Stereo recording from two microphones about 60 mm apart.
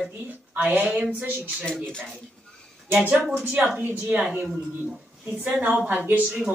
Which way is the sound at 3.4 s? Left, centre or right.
Right.